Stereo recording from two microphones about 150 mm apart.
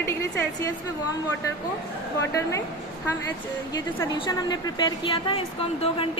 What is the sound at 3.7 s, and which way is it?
A woman's voice, 25° left (ahead or behind).